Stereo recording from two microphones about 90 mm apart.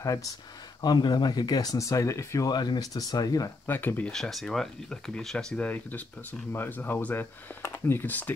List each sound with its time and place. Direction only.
0.0 s speech: 40° left (ahead or behind)
0.8 s speech: 55° left (ahead or behind); by 2.5 s 35° left (ahead or behind)
2.5 s speech: 50° left (ahead or behind)
3.6 s speech: 20° left (ahead or behind)
4.1 s speech: 5° left (ahead or behind)
5.7 s speech: 15° left (ahead or behind)